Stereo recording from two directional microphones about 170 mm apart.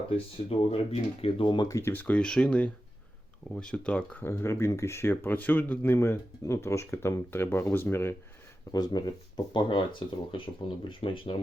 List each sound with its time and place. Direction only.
0.7 s speech: 35° left (ahead or behind)